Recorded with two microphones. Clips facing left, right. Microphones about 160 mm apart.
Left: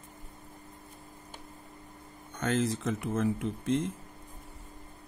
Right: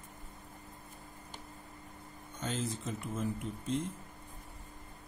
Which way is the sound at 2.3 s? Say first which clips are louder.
Left 8 dB; 75° left (ahead or behind).